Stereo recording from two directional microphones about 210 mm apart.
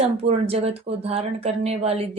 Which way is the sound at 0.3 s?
30° right (ahead or behind).